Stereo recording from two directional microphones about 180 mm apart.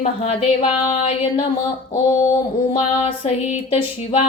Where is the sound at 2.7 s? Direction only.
30° left (ahead or behind).